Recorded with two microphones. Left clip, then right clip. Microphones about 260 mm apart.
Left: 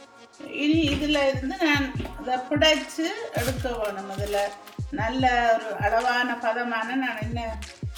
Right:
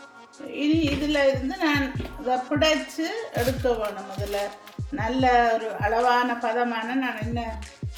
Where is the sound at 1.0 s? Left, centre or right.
Centre.